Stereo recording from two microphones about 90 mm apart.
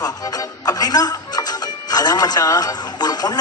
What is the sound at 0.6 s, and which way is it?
Music, 45° left (ahead or behind).